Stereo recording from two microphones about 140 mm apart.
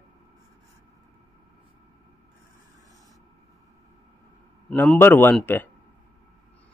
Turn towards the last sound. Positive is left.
turn(degrees=15)  # may be behind; listen again after turning